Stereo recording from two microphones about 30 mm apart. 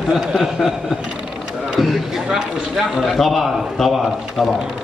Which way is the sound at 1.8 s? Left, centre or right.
Centre.